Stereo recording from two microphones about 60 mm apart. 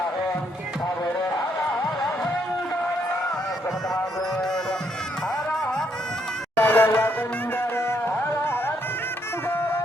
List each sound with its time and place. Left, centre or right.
6.6 s music: left